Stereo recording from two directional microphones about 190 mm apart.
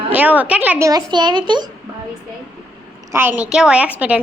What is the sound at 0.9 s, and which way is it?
Speech, 20° right (ahead or behind).